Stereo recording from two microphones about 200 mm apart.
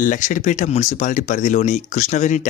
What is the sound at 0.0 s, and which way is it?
Speech, 40° left (ahead or behind).